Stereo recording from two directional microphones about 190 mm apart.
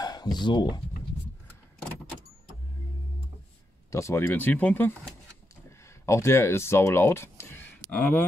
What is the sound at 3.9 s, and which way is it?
Speech, 15° left (ahead or behind).